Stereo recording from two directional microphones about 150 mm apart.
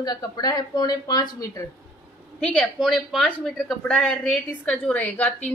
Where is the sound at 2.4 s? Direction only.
10° left (ahead or behind).